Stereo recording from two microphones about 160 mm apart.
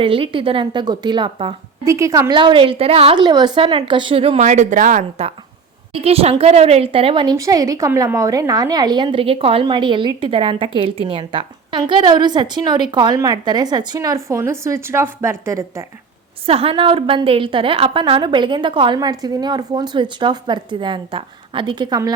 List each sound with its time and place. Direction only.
0.0 s a woman's voice: 35° right (ahead or behind)
1.8 s a woman's voice: 20° right (ahead or behind); by 5.0 s 55° right (ahead or behind)
5.9 s a woman's voice: 40° right (ahead or behind); by 15.9 s 20° right (ahead or behind)
16.5 s a woman's voice: 35° right (ahead or behind)